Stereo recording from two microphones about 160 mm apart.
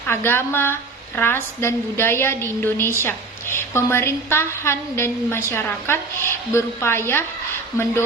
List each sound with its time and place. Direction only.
0.1 s a woman's voice: 15° left (ahead or behind)